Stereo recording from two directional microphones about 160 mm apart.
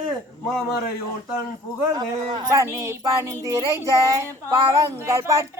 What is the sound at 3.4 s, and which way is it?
Child singing, 20° right (ahead or behind).